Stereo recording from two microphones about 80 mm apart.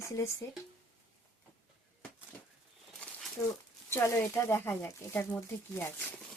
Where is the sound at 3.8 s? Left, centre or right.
Left.